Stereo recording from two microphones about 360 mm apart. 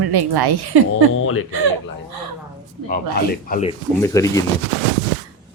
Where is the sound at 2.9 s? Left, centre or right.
Left.